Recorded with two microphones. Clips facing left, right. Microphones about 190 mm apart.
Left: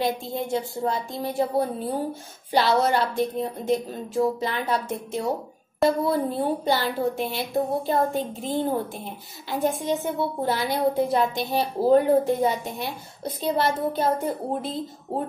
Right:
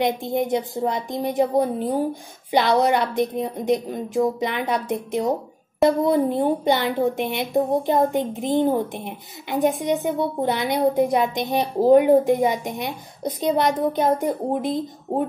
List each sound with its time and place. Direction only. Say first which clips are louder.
0.0 s a woman's voice: right 5 dB; 20° right (ahead or behind)